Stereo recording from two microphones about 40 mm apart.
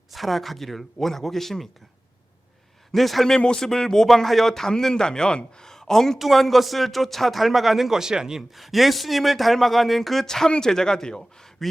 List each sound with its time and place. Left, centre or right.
0.1 s speech: centre
2.9 s speech: centre
3.2 s speech: centre
6.1 s speech: centre
8.4 s speech: centre
11.3 s a sound: centre